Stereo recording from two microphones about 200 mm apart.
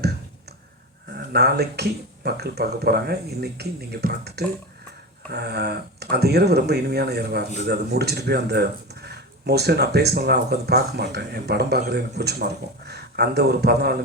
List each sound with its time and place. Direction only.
1.3 s speech: 55° right (ahead or behind)